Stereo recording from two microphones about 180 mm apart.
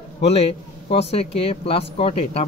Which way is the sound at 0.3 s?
35° left (ahead or behind).